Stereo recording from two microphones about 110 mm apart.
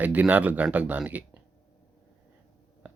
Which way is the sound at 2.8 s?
15° right (ahead or behind).